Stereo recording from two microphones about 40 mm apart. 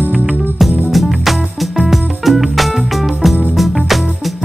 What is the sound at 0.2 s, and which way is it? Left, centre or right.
Music, right.